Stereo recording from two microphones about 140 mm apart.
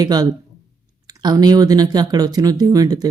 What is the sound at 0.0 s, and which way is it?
Speech, 25° right (ahead or behind).